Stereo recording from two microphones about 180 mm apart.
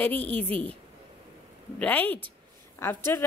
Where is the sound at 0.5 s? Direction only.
30° right (ahead or behind).